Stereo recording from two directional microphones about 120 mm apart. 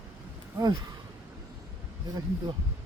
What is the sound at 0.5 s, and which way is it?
Speech, 30° right (ahead or behind).